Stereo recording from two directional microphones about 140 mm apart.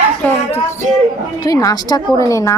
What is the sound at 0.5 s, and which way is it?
Music, 20° left (ahead or behind).